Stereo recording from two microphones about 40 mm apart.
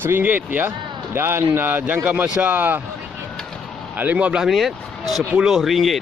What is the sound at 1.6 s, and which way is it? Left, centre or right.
A man's voice, right.